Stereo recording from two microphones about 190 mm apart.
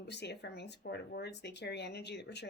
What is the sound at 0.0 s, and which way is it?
Speech, 60° left (ahead or behind).